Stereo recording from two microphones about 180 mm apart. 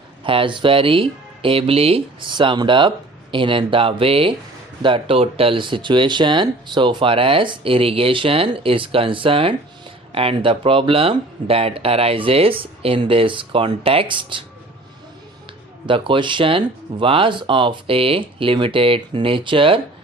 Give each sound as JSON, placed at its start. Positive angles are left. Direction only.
{"t": 0.3, "sound": "speech", "side_deg": -30}
{"t": 15.9, "sound": "speech", "side_deg": -25}